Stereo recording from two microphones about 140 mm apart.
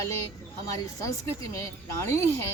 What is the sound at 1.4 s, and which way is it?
Speech, 20° left (ahead or behind).